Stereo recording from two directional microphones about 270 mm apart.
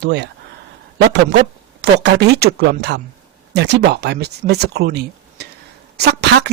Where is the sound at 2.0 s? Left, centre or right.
Right.